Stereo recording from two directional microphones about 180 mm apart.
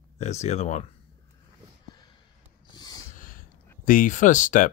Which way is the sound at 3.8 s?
45° left (ahead or behind).